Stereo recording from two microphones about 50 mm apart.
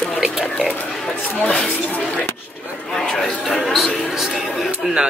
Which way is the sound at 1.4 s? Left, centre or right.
Left.